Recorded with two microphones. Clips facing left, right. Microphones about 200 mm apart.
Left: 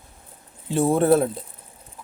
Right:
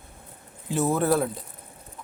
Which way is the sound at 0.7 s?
30° left (ahead or behind).